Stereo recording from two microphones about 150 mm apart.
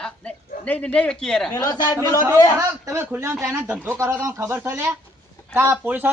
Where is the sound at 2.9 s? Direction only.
15° right (ahead or behind).